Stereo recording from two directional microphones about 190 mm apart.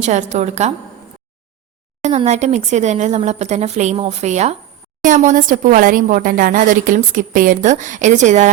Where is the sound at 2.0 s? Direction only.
35° right (ahead or behind).